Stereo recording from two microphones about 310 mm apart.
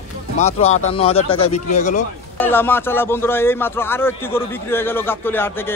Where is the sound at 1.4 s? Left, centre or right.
Left.